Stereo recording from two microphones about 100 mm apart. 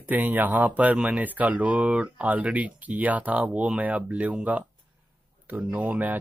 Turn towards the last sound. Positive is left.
turn(degrees=-15)  # may be behind; listen again after turning